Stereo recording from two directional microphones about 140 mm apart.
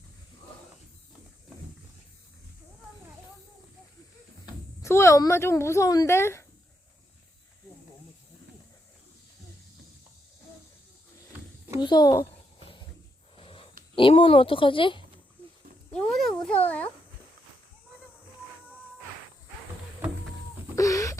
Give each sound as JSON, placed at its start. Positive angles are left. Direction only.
{"t": 4.8, "sound": "speech", "side_deg": 20}
{"t": 11.8, "sound": "a child's voice", "side_deg": 30}
{"t": 12.5, "sound": "wild animals", "side_deg": 40}
{"t": 13.3, "sound": "a sound", "side_deg": 40}
{"t": 13.9, "sound": "speech", "side_deg": 40}
{"t": 16.1, "sound": "a child's voice", "side_deg": 5}
{"t": 20.7, "sound": "wheeze", "side_deg": 25}